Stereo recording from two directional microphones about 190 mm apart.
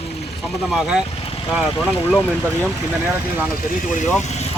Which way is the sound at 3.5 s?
45° left (ahead or behind).